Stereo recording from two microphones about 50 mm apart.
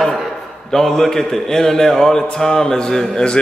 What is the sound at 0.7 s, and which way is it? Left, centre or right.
A man's voice, centre.